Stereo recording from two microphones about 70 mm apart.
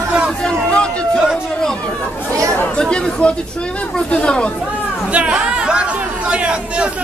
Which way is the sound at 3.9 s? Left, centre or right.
Centre.